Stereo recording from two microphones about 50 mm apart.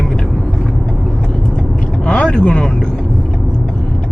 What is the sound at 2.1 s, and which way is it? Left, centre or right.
Speech, centre.